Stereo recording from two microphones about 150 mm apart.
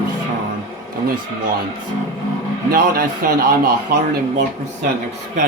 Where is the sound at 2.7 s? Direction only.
90° right.